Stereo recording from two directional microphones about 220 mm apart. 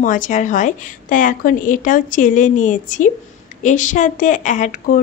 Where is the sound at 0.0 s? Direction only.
35° left (ahead or behind).